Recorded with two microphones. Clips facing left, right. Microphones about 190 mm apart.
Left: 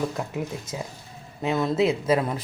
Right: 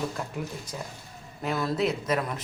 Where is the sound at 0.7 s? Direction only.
25° left (ahead or behind).